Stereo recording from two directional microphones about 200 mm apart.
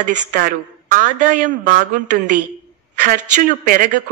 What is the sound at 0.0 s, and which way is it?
Speech, 40° right (ahead or behind).